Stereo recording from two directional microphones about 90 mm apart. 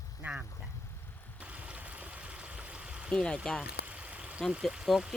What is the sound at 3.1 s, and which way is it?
Speech, 10° left (ahead or behind).